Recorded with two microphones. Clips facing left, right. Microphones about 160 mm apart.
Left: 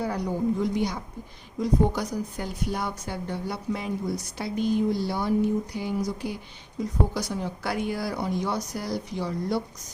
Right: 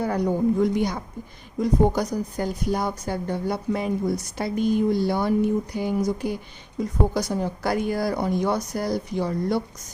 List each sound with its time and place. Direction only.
0.0 s a woman's voice: 50° right (ahead or behind)